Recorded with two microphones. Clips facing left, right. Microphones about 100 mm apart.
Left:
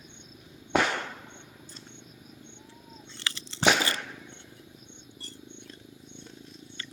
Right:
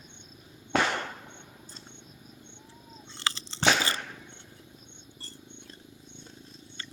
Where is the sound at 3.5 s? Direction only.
10° left (ahead or behind).